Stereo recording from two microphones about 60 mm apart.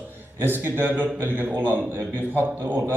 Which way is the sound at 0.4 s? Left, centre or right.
Right.